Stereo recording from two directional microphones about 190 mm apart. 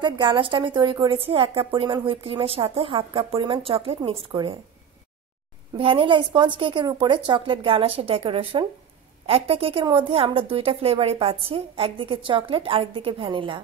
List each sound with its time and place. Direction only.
0.0 s a woman's voice: 25° right (ahead or behind)
5.8 s a woman's voice: 30° right (ahead or behind)